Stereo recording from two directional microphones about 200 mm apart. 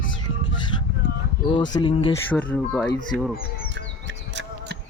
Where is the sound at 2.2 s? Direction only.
10° left (ahead or behind).